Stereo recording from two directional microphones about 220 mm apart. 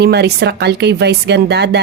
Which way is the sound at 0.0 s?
50° right (ahead or behind).